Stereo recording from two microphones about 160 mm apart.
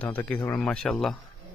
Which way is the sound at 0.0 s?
10° left (ahead or behind).